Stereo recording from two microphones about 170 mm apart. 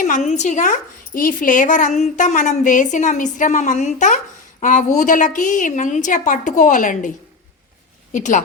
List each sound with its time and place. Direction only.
0.3 s a woman's voice: 45° left (ahead or behind)
8.1 s a woman's voice: 50° left (ahead or behind)